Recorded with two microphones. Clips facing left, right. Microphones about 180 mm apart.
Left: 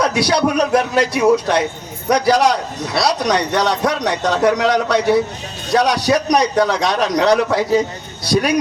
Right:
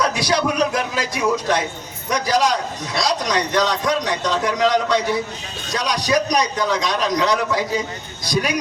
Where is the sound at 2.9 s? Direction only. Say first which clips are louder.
Left 4 dB; 65° left (ahead or behind).